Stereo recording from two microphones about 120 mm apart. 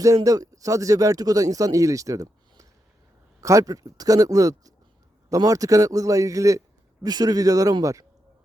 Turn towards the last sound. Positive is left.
turn(degrees=-30)  # may be behind; listen again after turning